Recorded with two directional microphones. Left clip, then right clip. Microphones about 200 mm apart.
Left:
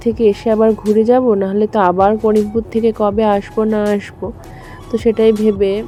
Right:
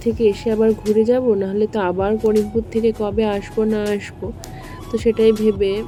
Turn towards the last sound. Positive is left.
turn(degrees=15)  # may be behind; listen again after turning